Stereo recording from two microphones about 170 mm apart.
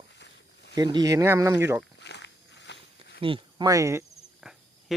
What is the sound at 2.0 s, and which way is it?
Walk, 90° left.